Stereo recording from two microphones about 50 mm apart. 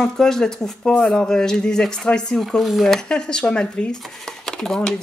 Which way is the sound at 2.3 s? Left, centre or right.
Centre.